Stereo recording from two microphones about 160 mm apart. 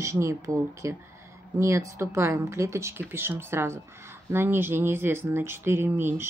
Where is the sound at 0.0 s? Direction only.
20° right (ahead or behind).